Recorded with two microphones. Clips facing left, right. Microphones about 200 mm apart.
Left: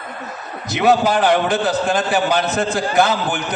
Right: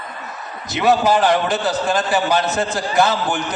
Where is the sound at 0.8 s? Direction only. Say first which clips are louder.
Even; 55° left (ahead or behind).